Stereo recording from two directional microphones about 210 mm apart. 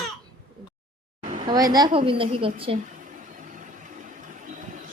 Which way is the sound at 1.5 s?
20° right (ahead or behind).